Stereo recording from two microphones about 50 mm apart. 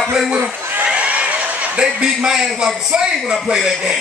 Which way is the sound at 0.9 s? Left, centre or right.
Right.